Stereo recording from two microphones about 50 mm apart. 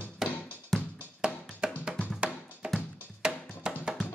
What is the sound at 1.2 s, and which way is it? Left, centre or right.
Music, centre.